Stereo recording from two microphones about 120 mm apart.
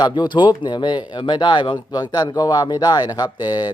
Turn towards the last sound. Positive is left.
turn(degrees=35)  # may be behind; listen again after turning